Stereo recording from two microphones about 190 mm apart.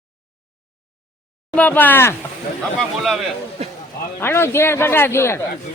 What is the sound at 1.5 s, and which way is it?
Speech, 10° left (ahead or behind).